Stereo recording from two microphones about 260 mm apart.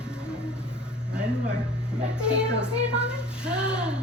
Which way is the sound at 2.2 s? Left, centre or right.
Centre.